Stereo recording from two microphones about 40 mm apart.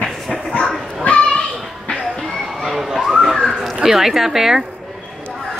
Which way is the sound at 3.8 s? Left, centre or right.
Centre.